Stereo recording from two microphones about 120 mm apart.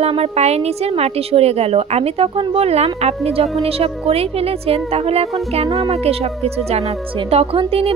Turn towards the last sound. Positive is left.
turn(degrees=-50)  # may be behind; listen again after turning